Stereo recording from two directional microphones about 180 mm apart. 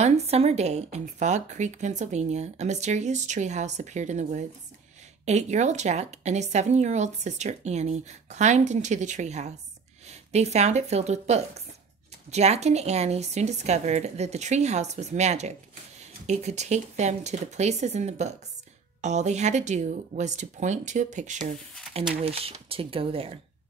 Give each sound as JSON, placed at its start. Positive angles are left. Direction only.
{"t": 0.0, "sound": "speech", "side_deg": -35}
{"t": 22.2, "sound": "speech", "side_deg": -35}